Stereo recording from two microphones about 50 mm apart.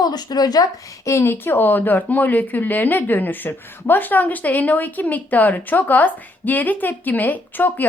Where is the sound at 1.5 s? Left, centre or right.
Left.